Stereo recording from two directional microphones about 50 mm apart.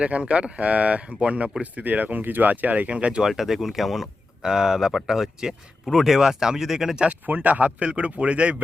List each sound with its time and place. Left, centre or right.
0.0 s speech: right
3.2 s speech: centre
7.3 s speech: right